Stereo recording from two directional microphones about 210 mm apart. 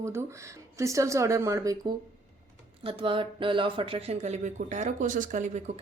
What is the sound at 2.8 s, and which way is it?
Speech, 25° right (ahead or behind).